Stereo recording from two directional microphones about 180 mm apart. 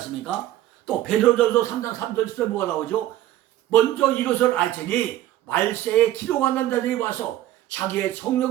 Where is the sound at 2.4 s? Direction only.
10° left (ahead or behind).